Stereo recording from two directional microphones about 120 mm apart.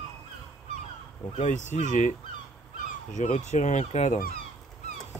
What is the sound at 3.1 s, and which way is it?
Speech, 85° left.